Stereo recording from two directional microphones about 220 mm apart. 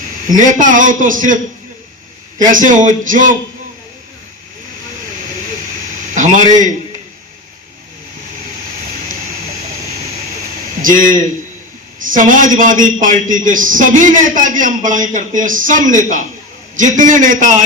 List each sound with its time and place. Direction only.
0.3 s a man's voice: 35° right (ahead or behind)
2.4 s a man's voice: 35° right (ahead or behind)
6.1 s a sound: 35° right (ahead or behind)
10.8 s a man's voice: 35° right (ahead or behind)